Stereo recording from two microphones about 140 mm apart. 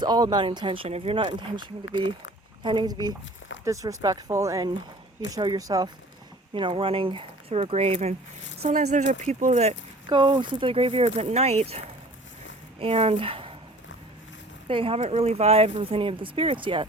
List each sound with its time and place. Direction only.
0.0 s speech: 30° right (ahead or behind)
6.5 s speech: 35° right (ahead or behind)
8.7 s speech: 55° right (ahead or behind)
10.1 s speech: 35° right (ahead or behind)
14.7 s speech: 40° right (ahead or behind)